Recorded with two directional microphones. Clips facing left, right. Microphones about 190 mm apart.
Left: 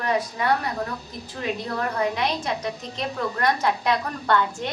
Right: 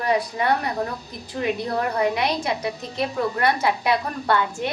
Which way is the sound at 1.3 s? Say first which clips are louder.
Right 4 dB; 20° right (ahead or behind).